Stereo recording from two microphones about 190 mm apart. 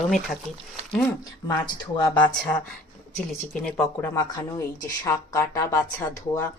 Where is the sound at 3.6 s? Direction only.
10° left (ahead or behind).